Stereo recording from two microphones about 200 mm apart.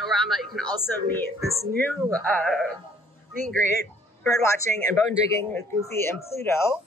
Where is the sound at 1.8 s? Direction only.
10° left (ahead or behind).